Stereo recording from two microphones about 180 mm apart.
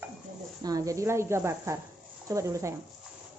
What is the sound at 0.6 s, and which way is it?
Speech, 20° right (ahead or behind).